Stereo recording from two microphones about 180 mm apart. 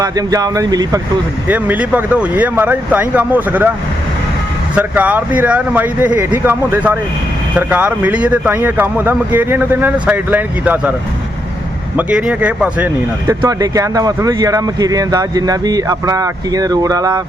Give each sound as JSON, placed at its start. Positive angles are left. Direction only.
{"t": 0.0, "sound": "speech", "side_deg": -20}
{"t": 1.5, "sound": "speech", "side_deg": -10}
{"t": 4.7, "sound": "speech", "side_deg": -10}
{"t": 11.9, "sound": "speech", "side_deg": -5}
{"t": 13.4, "sound": "speech", "side_deg": -20}